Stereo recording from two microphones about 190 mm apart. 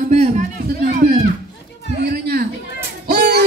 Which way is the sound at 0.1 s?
35° right (ahead or behind).